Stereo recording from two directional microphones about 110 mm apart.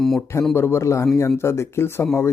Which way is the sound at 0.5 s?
25° left (ahead or behind).